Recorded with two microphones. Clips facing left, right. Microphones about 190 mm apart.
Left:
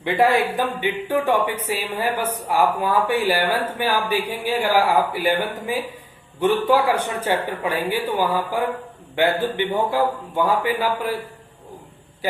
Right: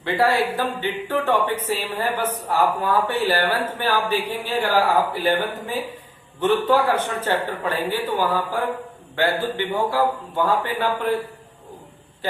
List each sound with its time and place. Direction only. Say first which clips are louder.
0.0 s speech: left 2 dB; 15° left (ahead or behind)